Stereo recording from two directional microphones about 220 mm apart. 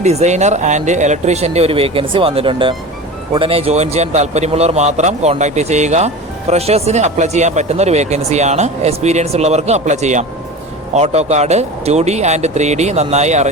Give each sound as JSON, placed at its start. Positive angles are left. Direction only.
{"t": 0.0, "sound": "speech", "side_deg": -30}